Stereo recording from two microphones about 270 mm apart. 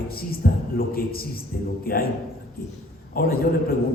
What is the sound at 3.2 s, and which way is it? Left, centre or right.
Speech, left.